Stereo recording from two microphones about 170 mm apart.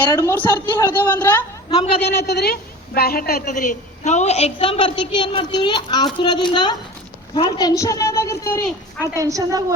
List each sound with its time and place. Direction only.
0.1 s a woman's voice: 15° left (ahead or behind)
2.0 s a woman's voice: 75° left (ahead or behind)
3.4 s a woman's voice: 45° left (ahead or behind); by 8.6 s 15° left (ahead or behind)
9.0 s a woman's voice: 20° right (ahead or behind)